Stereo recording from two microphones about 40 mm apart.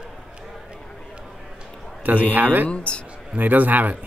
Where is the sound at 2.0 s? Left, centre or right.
Right.